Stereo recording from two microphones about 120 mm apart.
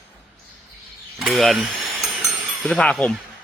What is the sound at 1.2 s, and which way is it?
Speech, centre (ahead or behind).